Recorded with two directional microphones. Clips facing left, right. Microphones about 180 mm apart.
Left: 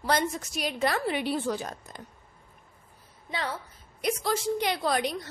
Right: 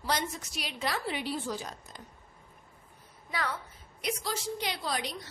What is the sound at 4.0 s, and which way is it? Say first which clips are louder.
A woman's voice: left 6 dB; 50° left (ahead or behind).